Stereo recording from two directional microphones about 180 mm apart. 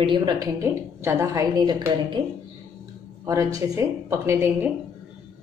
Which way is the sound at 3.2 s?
20° right (ahead or behind).